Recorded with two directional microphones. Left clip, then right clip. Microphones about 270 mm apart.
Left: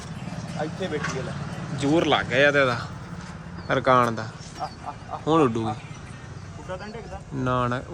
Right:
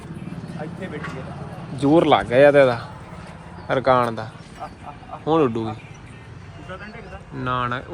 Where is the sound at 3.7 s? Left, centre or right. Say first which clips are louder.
Right 2 dB; centre.